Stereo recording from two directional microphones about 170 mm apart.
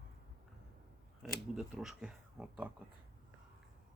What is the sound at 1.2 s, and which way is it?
Speech, centre (ahead or behind).